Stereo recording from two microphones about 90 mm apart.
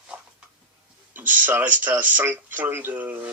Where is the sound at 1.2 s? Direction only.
20° right (ahead or behind).